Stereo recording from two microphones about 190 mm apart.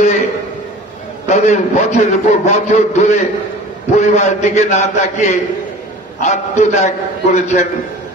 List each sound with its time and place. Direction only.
1.2 s a man's voice: 35° left (ahead or behind)